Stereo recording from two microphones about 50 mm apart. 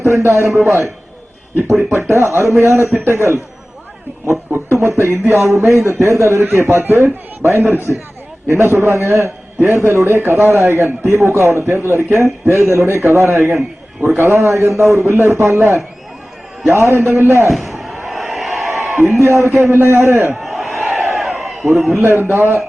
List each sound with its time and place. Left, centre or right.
0.0 s a man's voice: right
2.0 s a sound: right
3.1 s a man's voice: right
4.7 s a sound: right
6.6 s a man's voice: right
17.5 s slam: centre
19.2 s a man's voice: right
20.3 s crowd: centre
21.2 s a sound: centre
21.9 s a man's voice: right